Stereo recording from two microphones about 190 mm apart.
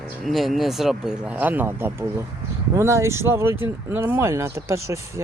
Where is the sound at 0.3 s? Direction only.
Centre (ahead or behind).